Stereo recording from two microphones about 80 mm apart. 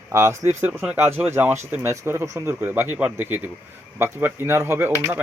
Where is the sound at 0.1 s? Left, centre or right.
Right.